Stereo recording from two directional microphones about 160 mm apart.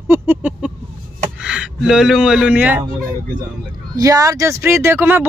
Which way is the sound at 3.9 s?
20° right (ahead or behind).